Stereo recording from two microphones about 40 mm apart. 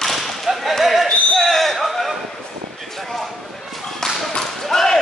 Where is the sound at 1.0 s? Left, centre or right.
Centre.